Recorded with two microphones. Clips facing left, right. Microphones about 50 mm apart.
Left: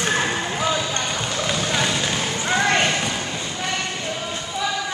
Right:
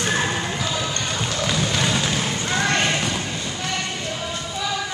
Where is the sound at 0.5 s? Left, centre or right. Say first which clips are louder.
Left 3 dB; centre.